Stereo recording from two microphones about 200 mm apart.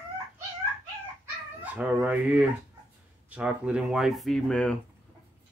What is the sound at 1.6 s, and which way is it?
Speech, 5° right (ahead or behind).